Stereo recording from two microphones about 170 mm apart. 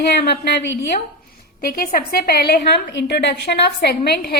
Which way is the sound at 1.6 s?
60° left (ahead or behind).